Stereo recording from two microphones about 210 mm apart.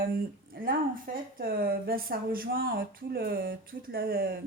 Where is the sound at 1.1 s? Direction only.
40° right (ahead or behind).